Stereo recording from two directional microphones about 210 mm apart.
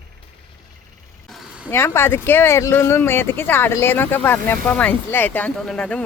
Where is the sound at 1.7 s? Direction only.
10° left (ahead or behind).